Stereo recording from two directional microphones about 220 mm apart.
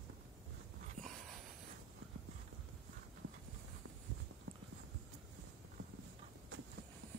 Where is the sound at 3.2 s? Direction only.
90° right.